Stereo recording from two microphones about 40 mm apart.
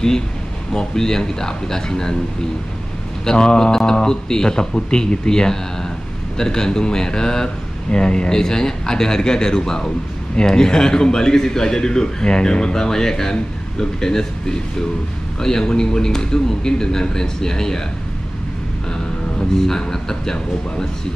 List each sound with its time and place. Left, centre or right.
0.7 s a man's voice: centre
3.3 s a man's voice: centre
19.5 s a man's voice: centre